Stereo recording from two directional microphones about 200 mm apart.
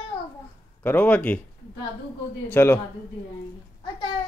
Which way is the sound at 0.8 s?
10° left (ahead or behind).